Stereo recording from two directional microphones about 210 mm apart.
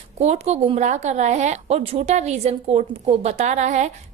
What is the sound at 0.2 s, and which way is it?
A woman's voice, 30° right (ahead or behind).